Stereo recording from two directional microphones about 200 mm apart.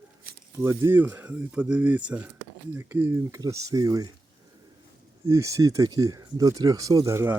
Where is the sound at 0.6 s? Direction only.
15° right (ahead or behind).